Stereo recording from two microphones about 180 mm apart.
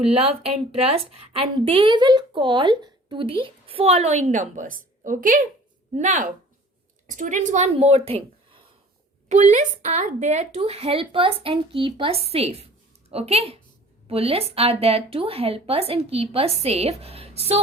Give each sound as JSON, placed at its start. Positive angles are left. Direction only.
{"t": 0.0, "sound": "a woman's voice", "side_deg": -35}